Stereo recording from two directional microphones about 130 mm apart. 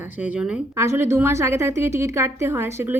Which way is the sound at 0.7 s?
20° right (ahead or behind).